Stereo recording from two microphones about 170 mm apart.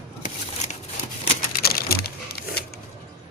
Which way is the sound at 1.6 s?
65° left (ahead or behind).